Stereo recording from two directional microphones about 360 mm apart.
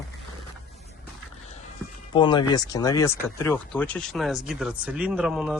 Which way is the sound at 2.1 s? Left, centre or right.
Centre.